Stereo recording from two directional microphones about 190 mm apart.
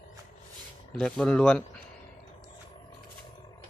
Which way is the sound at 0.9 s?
5° left (ahead or behind).